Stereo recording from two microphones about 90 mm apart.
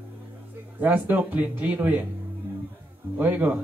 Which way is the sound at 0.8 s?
20° right (ahead or behind).